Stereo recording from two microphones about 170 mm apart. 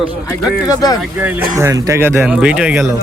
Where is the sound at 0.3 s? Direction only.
20° left (ahead or behind).